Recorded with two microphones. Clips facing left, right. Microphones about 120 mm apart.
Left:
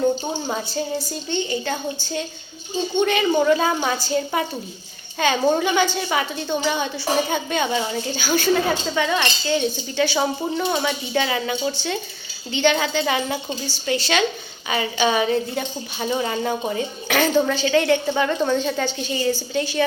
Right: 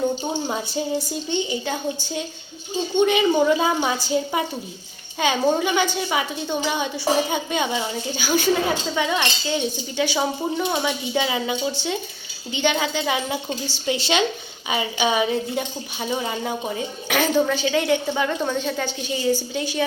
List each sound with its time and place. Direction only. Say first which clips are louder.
0.2 s a woman's voice: even; 10° right (ahead or behind)
5.5 s a woman's voice: left 2 dB; 5° right (ahead or behind)
13.7 s a woman's voice: left 1 dB; 20° right (ahead or behind)